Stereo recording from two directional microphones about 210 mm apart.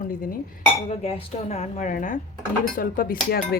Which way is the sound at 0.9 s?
30° left (ahead or behind).